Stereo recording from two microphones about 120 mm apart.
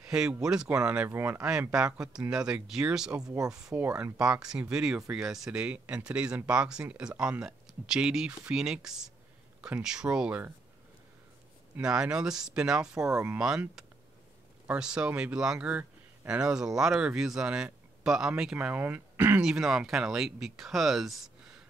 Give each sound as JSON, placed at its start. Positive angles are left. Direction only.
{"t": 0.0, "sound": "speech", "side_deg": -5}
{"t": 1.1, "sound": "speech", "side_deg": -20}
{"t": 1.4, "sound": "speech", "side_deg": -10}
{"t": 3.7, "sound": "speech", "side_deg": -15}
{"t": 11.7, "sound": "speech", "side_deg": -5}
{"t": 19.4, "sound": "speech", "side_deg": -5}